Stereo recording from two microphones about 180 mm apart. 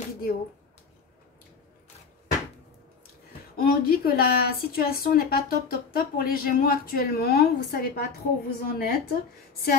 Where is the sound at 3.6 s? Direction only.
55° left (ahead or behind).